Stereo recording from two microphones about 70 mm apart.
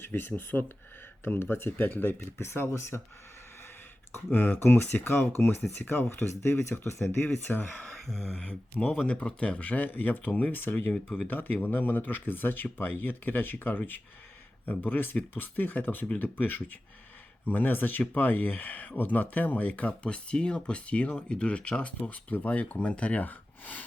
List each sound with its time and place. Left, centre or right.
0.0 s speech: left
4.1 s speech: left
7.9 s speech: centre; by 10.9 s left
10.9 s speech: centre
11.3 s speech: left